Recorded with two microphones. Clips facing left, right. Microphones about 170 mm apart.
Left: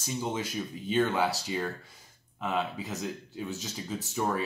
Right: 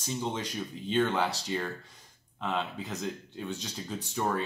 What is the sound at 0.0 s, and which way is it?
Speech, 5° left (ahead or behind).